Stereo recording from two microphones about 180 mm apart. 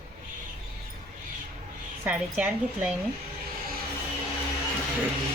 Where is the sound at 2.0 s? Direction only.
10° right (ahead or behind).